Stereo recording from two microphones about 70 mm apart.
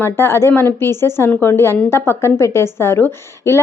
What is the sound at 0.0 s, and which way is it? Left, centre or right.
Speech, left.